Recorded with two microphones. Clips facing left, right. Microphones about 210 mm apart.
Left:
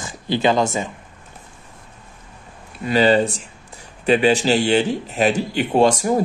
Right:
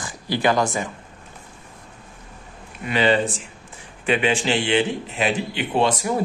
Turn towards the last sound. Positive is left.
turn(degrees=45)  # may be behind; listen again after turning